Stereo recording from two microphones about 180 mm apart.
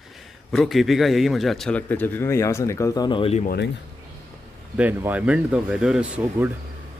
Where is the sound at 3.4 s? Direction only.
70° left (ahead or behind).